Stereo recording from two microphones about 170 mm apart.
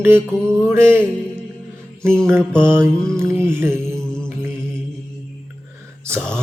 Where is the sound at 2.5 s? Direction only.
15° right (ahead or behind).